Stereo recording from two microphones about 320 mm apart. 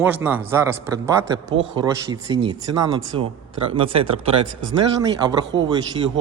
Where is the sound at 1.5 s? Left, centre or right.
Right.